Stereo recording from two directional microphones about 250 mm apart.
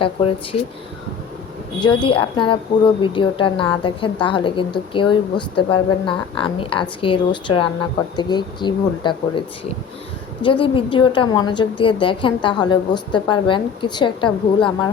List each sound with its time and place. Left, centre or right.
0.0 s a woman's voice: left
1.8 s a woman's voice: centre
10.4 s a woman's voice: centre